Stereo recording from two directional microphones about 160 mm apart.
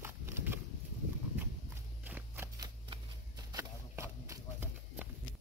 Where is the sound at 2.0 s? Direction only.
10° right (ahead or behind).